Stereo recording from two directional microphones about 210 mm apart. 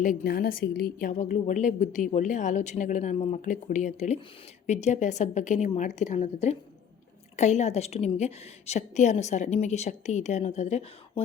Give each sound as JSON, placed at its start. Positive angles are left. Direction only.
{"t": 0.0, "sound": "a woman's voice", "side_deg": 45}